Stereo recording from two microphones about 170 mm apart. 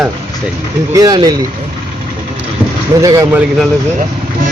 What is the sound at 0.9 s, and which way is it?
Speech, 20° right (ahead or behind).